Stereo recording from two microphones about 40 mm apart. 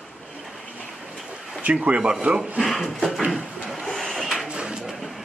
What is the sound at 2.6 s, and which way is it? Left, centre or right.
Speech, centre.